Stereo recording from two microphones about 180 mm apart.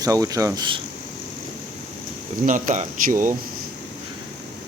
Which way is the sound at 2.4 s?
45° right (ahead or behind).